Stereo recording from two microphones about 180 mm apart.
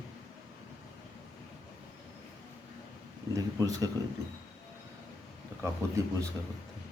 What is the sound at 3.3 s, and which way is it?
Speech, 20° right (ahead or behind).